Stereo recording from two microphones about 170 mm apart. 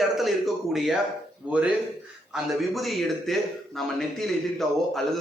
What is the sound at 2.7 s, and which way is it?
Speech, centre (ahead or behind).